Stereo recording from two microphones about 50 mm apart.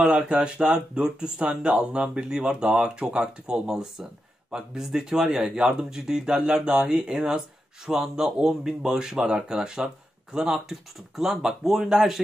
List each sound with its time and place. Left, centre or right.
0.2 s speech: centre